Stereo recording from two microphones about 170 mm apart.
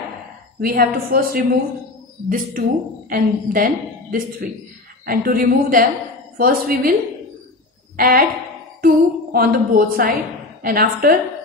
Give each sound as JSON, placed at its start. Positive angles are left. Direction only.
{"t": 0.6, "sound": "a woman's voice", "side_deg": -60}
{"t": 8.0, "sound": "a woman's voice", "side_deg": -60}